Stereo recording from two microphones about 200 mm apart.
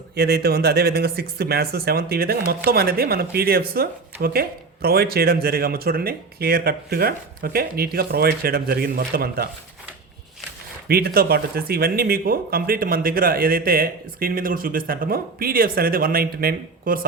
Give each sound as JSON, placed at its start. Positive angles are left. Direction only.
{"t": 0.2, "sound": "speech", "side_deg": -55}
{"t": 10.8, "sound": "speech", "side_deg": -50}